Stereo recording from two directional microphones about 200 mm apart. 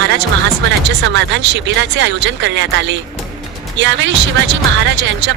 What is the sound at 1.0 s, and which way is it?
A woman's voice, 65° right (ahead or behind).